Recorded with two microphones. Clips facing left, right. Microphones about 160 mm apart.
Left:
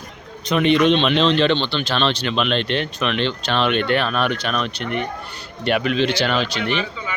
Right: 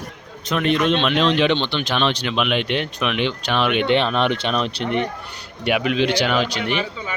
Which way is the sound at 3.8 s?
20° right (ahead or behind).